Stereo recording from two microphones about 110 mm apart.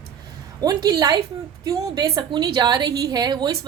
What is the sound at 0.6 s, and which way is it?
A woman's voice, 35° right (ahead or behind).